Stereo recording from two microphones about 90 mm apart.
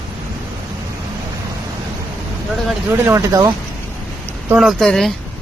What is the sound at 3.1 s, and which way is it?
Speech, 35° right (ahead or behind).